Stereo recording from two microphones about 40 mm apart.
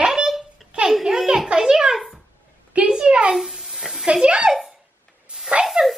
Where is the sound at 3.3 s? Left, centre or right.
Centre.